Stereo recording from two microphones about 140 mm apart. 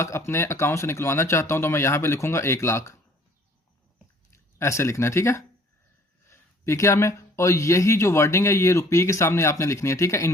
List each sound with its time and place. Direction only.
0.0 s speech: 20° left (ahead or behind)
4.5 s speech: 20° left (ahead or behind)